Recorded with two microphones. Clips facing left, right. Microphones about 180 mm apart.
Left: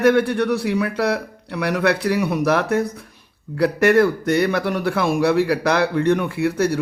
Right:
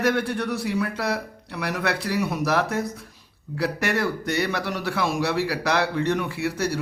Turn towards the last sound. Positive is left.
turn(degrees=55)  # may be behind; listen again after turning